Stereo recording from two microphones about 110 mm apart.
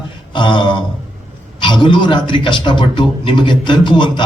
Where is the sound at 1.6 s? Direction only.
50° left (ahead or behind).